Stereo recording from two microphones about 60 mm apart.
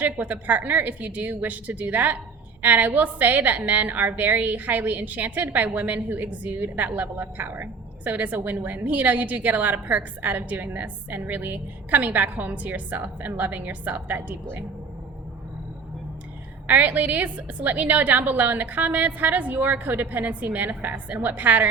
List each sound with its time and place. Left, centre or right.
0.0 s a woman's voice: right
16.6 s a woman's voice: right